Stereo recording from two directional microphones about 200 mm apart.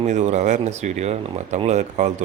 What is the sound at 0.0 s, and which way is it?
Speech, 35° right (ahead or behind).